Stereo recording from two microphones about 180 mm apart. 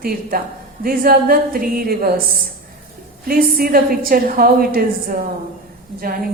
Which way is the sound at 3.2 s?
55° right (ahead or behind).